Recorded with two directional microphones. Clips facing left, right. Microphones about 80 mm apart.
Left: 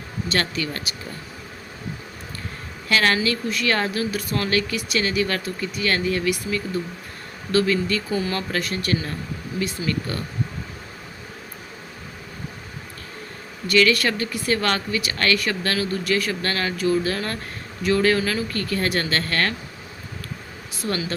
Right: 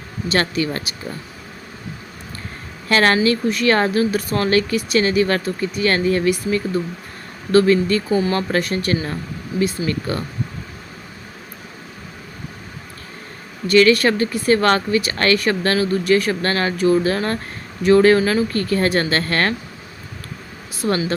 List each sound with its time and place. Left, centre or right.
0.5 s speech: right
2.9 s speech: right
13.7 s speech: right
20.8 s speech: right